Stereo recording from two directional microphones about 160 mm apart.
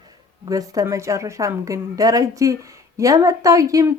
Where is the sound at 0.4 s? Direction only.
20° right (ahead or behind).